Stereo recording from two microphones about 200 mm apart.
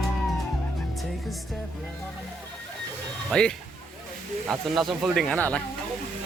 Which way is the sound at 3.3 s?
5° left (ahead or behind).